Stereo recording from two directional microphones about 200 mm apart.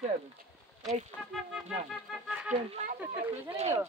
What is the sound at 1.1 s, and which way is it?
Speech, centre (ahead or behind).